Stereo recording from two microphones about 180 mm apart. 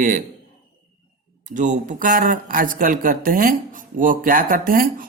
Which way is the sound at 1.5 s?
45° right (ahead or behind).